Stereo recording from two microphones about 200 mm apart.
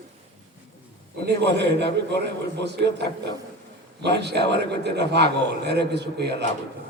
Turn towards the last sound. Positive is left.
turn(degrees=-55)  # may be behind; listen again after turning